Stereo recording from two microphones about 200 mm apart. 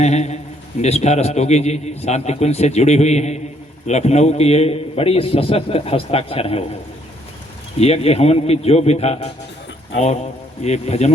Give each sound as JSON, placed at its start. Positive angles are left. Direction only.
{"t": 0.0, "sound": "a man's voice", "side_deg": 35}
{"t": 7.8, "sound": "a man's voice", "side_deg": 30}
{"t": 10.6, "sound": "a man's voice", "side_deg": 35}